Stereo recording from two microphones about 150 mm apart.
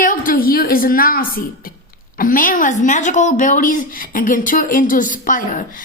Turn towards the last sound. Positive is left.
turn(degrees=65)  # may be behind; listen again after turning